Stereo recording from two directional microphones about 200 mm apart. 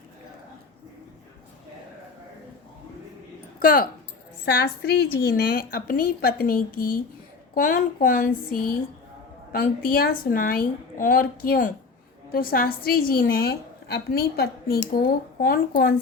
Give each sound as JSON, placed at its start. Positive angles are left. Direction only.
{"t": 3.6, "sound": "a woman's voice", "side_deg": 45}